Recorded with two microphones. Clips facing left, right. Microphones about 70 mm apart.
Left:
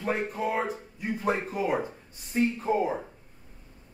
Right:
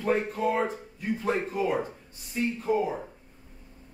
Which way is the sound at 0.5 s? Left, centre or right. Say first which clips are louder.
Right 2 dB; centre.